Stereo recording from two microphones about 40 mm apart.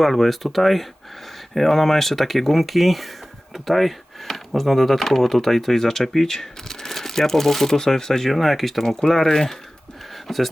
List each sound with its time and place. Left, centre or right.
0.0 s speech: centre